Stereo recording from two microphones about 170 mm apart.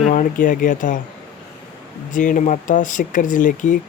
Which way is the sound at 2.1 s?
50° left (ahead or behind).